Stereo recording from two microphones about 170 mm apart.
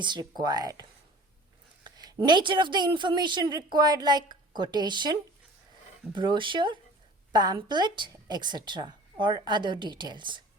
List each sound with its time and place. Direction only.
0.0 s a woman's voice: 25° right (ahead or behind)
6.1 s a woman's voice: 30° right (ahead or behind)